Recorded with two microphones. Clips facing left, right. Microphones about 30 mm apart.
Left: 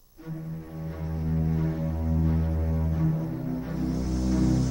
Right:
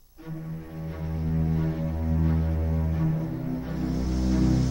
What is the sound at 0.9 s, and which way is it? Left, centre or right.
Music, centre.